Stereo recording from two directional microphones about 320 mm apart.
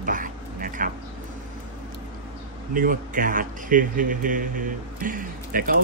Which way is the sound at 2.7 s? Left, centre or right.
Right.